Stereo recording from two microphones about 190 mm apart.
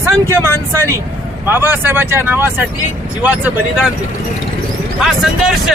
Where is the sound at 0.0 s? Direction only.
15° right (ahead or behind).